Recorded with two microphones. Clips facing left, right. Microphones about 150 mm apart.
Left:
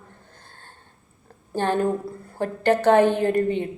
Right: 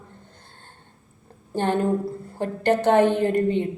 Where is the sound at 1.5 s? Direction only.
20° right (ahead or behind).